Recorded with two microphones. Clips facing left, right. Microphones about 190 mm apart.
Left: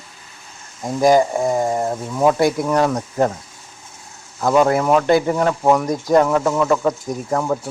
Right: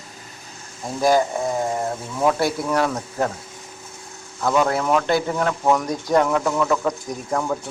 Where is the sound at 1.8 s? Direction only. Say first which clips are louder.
Left 4 dB; 15° left (ahead or behind).